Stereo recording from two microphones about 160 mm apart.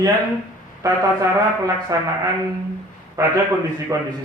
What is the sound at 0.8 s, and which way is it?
A man's voice, 20° right (ahead or behind).